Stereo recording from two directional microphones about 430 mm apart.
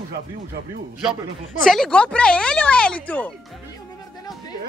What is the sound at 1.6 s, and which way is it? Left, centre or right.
Speech, centre.